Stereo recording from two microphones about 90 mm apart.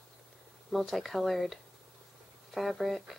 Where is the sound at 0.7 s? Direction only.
Centre (ahead or behind).